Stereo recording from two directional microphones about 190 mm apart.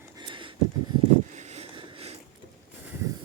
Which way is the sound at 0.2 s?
25° right (ahead or behind).